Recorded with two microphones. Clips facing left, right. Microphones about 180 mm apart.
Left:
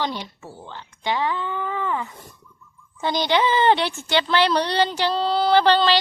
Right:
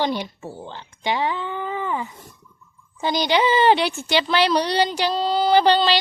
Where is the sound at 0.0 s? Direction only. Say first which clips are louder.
Right 4 dB; 15° right (ahead or behind).